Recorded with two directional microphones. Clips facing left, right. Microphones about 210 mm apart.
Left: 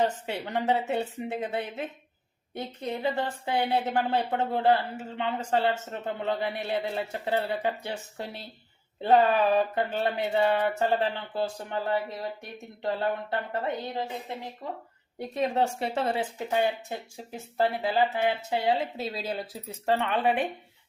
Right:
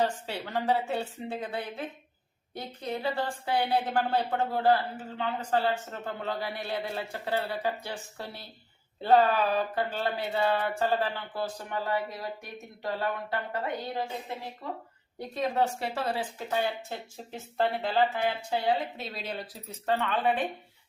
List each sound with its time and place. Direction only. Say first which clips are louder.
0.0 s a woman's voice: left 2 dB; 20° left (ahead or behind)